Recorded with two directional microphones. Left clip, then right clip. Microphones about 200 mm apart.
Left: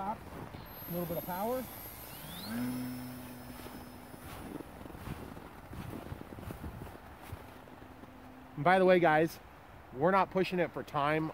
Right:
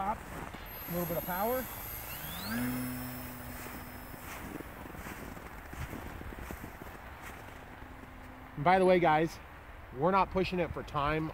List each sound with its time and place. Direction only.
0.9 s speech: 10° left (ahead or behind)
2.2 s a sound: 5° left (ahead or behind)
8.6 s speech: 50° left (ahead or behind)